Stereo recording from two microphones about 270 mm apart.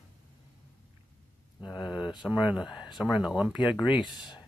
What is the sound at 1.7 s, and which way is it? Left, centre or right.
Speech, centre.